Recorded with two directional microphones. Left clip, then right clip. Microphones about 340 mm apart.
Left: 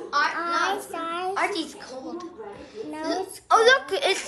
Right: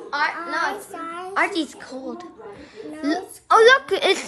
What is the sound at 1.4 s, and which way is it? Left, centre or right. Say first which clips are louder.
A child's voice: right 4 dB; centre.